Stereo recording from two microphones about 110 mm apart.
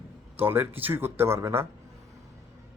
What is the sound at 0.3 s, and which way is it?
Speech, 20° right (ahead or behind).